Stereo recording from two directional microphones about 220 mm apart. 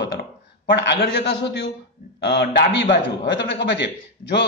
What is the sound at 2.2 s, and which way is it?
A man's voice, 50° left (ahead or behind).